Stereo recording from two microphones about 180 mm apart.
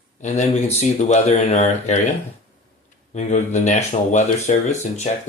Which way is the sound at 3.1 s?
40° left (ahead or behind).